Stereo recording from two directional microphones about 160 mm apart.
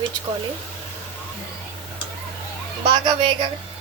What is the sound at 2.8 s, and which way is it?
Speech, 30° right (ahead or behind).